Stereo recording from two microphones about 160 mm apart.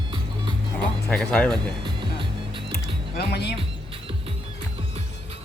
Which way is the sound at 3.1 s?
90° left.